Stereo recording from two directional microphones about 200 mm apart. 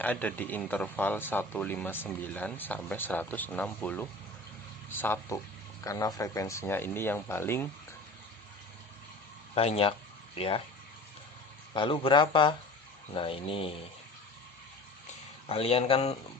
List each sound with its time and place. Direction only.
0.0 s speech: 10° left (ahead or behind)
9.6 s speech: 30° left (ahead or behind)
11.7 s speech: 25° left (ahead or behind)
15.4 s speech: 30° left (ahead or behind)